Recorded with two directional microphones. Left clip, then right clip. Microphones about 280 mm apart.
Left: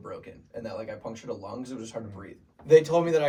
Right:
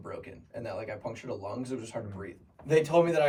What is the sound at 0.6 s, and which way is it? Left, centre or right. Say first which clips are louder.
Speech: even; centre.